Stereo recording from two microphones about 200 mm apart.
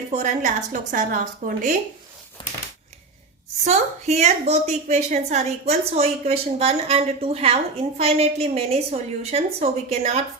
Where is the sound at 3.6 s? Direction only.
35° right (ahead or behind).